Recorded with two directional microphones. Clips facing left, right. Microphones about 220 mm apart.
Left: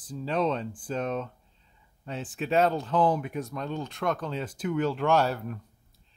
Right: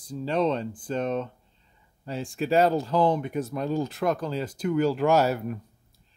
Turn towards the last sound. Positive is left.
turn(degrees=-10)  # may be behind; listen again after turning